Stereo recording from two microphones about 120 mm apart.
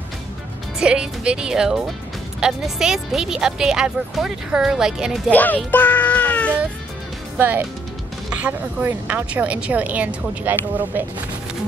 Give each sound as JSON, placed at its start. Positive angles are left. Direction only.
{"t": 0.7, "sound": "speech", "side_deg": -10}
{"t": 5.3, "sound": "speech", "side_deg": 15}
{"t": 5.7, "sound": "music", "side_deg": 15}
{"t": 7.3, "sound": "speech", "side_deg": -15}